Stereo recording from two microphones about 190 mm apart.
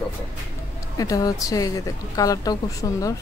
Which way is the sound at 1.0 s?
20° left (ahead or behind).